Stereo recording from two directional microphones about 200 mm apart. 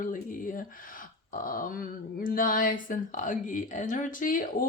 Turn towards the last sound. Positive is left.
turn(degrees=45)  # may be behind; listen again after turning